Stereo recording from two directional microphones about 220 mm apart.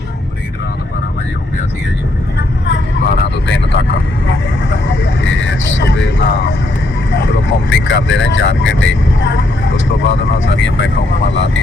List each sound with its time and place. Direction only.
2.6 s vehicle: 50° left (ahead or behind)
7.1 s speech: 55° left (ahead or behind)